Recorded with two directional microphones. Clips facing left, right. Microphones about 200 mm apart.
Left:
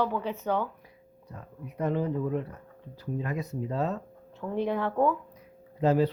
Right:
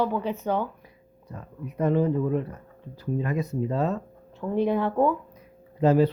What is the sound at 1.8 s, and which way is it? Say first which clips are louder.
Speech: right 6 dB; 65° right (ahead or behind).